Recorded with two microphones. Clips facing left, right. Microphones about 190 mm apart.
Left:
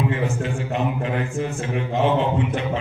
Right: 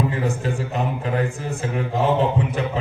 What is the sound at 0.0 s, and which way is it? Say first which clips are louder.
A man's voice: even; 40° right (ahead or behind).